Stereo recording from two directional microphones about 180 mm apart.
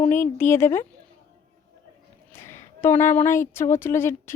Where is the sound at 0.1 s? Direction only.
15° left (ahead or behind).